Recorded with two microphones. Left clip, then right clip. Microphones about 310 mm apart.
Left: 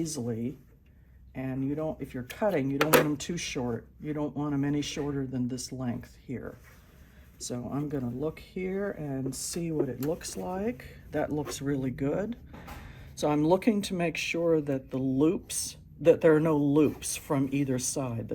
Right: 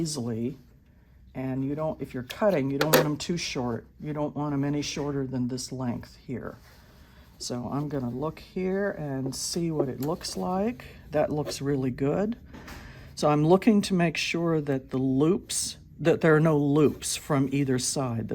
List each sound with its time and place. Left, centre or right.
0.0 s speech: right